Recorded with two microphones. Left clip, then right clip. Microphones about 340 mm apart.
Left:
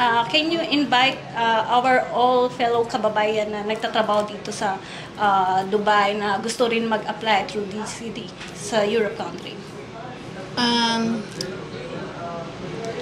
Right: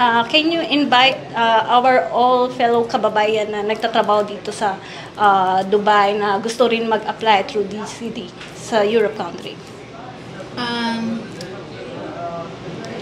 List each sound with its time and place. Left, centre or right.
0.0 s a woman's voice: right
10.5 s speech: left